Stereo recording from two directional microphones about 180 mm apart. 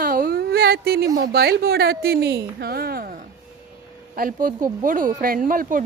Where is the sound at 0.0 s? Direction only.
55° right (ahead or behind).